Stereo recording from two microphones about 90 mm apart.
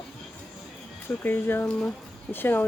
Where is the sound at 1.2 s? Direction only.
25° left (ahead or behind).